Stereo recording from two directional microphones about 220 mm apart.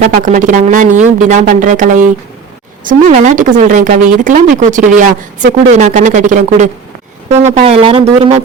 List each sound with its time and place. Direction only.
0.0 s a woman's voice: 35° right (ahead or behind)